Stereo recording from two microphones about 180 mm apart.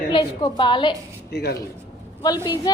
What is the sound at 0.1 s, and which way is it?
Speech, 25° left (ahead or behind).